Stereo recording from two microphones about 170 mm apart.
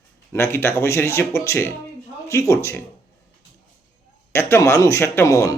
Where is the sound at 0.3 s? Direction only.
15° left (ahead or behind).